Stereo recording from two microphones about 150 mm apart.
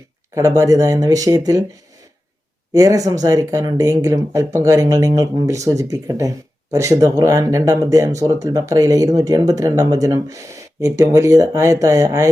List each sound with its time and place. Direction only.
0.3 s speech: 20° right (ahead or behind)
2.7 s speech: 20° right (ahead or behind)